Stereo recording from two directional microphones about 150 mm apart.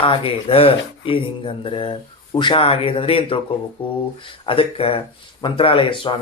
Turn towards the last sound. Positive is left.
turn(degrees=35)  # may be behind; listen again after turning